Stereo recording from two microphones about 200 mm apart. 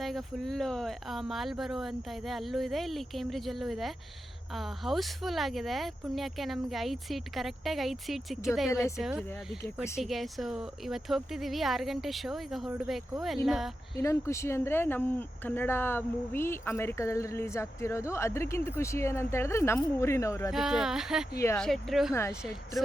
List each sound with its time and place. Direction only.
0.0 s speech: centre (ahead or behind)
14.0 s speech: 15° left (ahead or behind)
20.5 s speech: centre (ahead or behind)
21.3 s speech: 15° left (ahead or behind)
21.6 s speech: centre (ahead or behind)
22.1 s speech: 15° left (ahead or behind)